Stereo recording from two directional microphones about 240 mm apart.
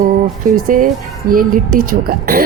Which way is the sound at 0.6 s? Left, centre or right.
Right.